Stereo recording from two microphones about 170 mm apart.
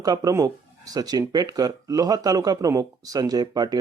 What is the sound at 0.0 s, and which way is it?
Speech, 20° right (ahead or behind).